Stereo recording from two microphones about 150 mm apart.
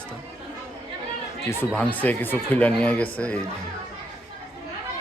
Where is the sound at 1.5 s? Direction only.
10° left (ahead or behind).